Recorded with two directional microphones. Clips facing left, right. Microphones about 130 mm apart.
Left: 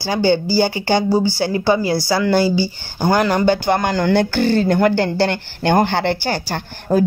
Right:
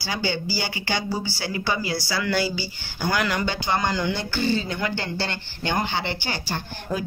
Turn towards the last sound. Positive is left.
turn(degrees=50)  # may be behind; listen again after turning